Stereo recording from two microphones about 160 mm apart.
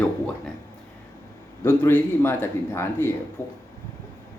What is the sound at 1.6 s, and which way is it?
A man's voice, 15° left (ahead or behind).